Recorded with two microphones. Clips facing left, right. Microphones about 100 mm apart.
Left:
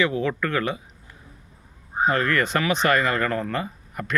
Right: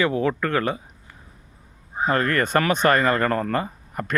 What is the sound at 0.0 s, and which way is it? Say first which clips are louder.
Speech: right 2 dB; 40° right (ahead or behind).